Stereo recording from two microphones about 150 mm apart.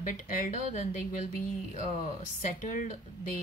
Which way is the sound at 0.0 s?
60° left (ahead or behind).